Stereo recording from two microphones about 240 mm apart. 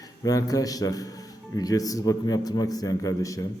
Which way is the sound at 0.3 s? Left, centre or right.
Centre.